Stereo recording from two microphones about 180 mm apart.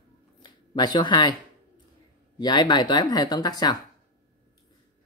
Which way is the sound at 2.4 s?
25° left (ahead or behind).